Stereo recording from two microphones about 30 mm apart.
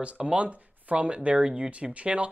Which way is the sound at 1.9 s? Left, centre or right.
Right.